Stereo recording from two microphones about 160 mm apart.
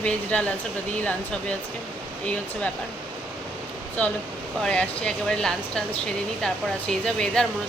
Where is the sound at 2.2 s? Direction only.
5° left (ahead or behind).